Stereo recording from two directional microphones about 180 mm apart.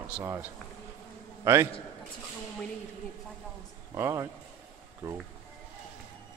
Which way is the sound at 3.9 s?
15° right (ahead or behind).